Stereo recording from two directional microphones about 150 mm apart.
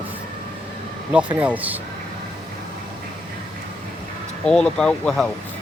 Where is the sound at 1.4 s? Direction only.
10° right (ahead or behind).